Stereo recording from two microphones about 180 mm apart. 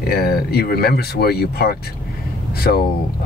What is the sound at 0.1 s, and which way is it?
Speech, 60° left (ahead or behind).